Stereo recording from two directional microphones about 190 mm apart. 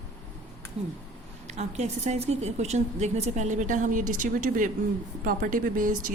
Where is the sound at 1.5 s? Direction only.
35° right (ahead or behind).